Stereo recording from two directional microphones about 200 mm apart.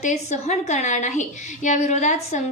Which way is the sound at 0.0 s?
35° left (ahead or behind).